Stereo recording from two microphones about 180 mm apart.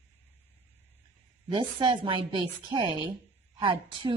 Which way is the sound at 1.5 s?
25° right (ahead or behind).